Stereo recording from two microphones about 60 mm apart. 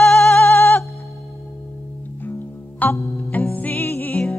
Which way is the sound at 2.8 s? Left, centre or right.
Left.